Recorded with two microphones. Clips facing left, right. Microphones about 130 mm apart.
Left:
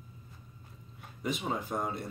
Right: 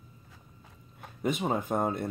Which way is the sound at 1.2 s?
50° right (ahead or behind).